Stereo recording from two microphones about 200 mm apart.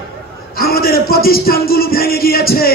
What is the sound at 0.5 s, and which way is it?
A man's voice, 50° left (ahead or behind).